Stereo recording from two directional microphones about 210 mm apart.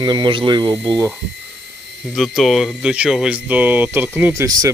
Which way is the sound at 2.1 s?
Centre (ahead or behind).